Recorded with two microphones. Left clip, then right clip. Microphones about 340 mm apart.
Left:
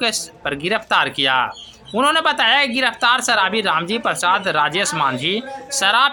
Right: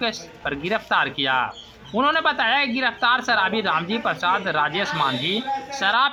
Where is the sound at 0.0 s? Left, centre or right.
Right.